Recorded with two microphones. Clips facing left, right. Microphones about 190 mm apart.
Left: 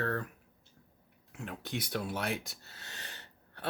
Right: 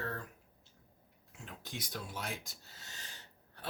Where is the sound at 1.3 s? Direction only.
65° left (ahead or behind).